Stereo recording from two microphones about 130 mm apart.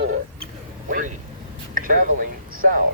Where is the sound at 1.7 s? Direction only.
90° right.